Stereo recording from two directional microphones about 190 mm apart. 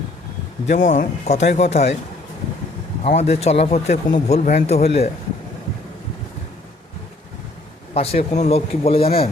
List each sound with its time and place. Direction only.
0.7 s speech: 40° left (ahead or behind)
3.0 s speech: 35° left (ahead or behind)
7.9 s speech: 30° left (ahead or behind)